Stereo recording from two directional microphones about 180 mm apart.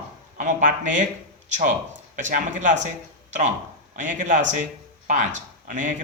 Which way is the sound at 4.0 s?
45° right (ahead or behind).